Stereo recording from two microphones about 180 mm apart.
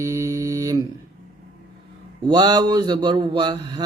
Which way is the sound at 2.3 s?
25° right (ahead or behind).